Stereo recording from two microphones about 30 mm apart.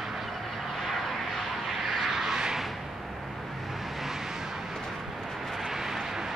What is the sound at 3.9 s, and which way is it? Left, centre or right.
Vehicle, centre.